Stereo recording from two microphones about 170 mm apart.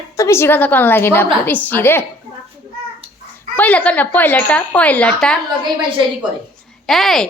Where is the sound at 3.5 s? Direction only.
10° left (ahead or behind).